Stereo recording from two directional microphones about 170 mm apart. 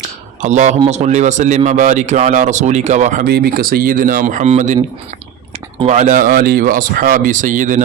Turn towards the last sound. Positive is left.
turn(degrees=-50)  # may be behind; listen again after turning